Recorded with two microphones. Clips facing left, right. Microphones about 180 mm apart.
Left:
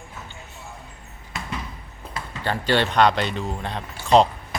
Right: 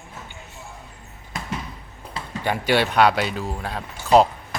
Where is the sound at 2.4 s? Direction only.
10° right (ahead or behind).